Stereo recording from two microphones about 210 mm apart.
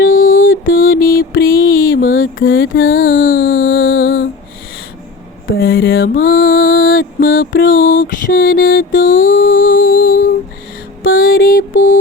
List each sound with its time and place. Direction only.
0.0 s music: 40° left (ahead or behind)
0.6 s a sound: 40° left (ahead or behind)
2.4 s mantra: 45° left (ahead or behind)
5.5 s mantra: 45° left (ahead or behind)
8.9 s a sound: 40° left (ahead or behind)
11.0 s mantra: 45° left (ahead or behind)